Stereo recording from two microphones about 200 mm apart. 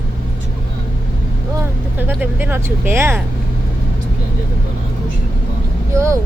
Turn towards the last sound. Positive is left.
turn(degrees=-15)  # may be behind; listen again after turning